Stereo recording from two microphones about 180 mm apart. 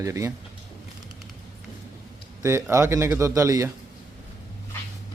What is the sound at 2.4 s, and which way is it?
A man's voice, 15° right (ahead or behind).